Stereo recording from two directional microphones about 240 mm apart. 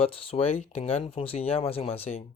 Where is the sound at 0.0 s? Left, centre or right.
Left.